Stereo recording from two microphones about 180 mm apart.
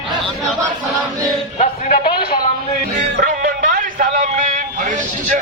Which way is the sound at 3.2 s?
45° right (ahead or behind).